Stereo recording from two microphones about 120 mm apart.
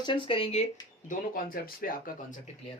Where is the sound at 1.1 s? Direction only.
90° left.